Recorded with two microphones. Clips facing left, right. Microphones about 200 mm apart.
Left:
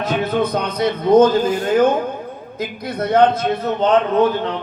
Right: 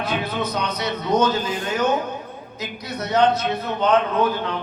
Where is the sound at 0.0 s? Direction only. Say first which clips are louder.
Left 6 dB; 50° left (ahead or behind).